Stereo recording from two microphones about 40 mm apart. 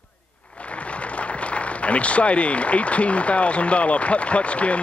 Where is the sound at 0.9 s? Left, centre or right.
Left.